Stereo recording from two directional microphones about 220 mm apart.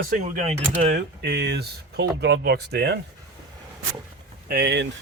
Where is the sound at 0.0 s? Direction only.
30° right (ahead or behind); by 3.0 s 50° right (ahead or behind).